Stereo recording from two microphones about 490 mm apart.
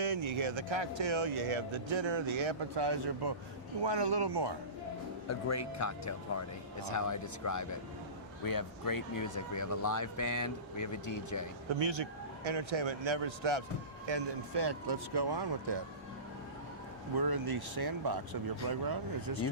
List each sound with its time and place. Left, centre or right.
0.0 s speech: right
5.3 s speech: left
11.8 s speech: right
14.1 s speech: right
17.2 s speech: right